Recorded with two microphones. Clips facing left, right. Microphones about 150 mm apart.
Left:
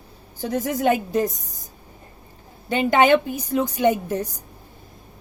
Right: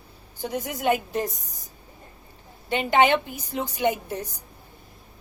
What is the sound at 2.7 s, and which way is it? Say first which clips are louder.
A woman's voice: left 4 dB; 45° left (ahead or behind).